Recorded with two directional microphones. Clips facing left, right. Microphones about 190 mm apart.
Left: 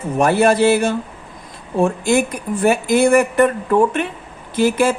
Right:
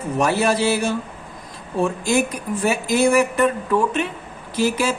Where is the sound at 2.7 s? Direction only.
55° left (ahead or behind).